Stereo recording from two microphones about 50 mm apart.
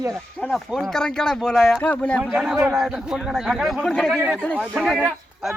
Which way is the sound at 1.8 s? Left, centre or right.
Left.